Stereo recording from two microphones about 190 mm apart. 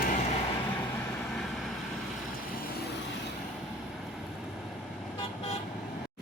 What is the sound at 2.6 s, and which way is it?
Vehicle, 55° left (ahead or behind).